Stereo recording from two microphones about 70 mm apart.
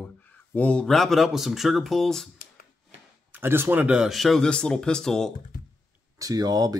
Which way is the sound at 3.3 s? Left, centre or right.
Right.